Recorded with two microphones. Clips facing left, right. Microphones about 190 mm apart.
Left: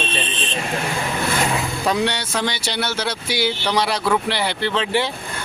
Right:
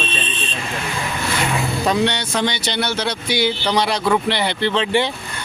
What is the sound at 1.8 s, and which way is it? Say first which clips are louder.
Speech: right 2 dB; 5° left (ahead or behind).